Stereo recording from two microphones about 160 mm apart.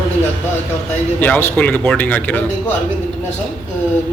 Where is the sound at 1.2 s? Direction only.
10° left (ahead or behind).